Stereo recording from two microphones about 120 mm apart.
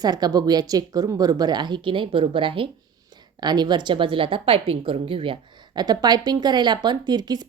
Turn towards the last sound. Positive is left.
turn(degrees=-35)  # may be behind; listen again after turning